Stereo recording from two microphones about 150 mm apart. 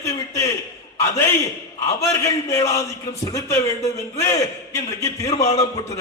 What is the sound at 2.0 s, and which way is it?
A man's voice, 20° left (ahead or behind).